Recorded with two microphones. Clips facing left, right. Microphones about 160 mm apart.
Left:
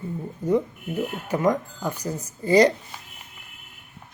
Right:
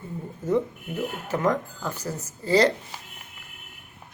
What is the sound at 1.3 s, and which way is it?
Speech, 15° left (ahead or behind).